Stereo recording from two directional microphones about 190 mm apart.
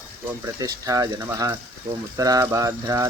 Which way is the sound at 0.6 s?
20° right (ahead or behind).